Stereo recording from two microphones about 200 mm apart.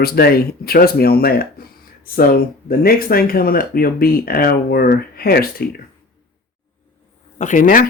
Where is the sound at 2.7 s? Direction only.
50° left (ahead or behind).